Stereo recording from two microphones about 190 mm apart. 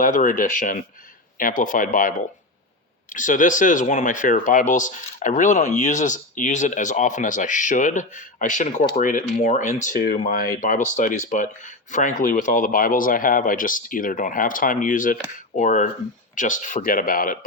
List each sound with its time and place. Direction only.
0.0 s speech: 45° left (ahead or behind)